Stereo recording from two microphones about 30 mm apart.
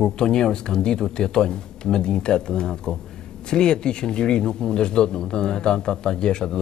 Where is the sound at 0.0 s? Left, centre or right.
Left.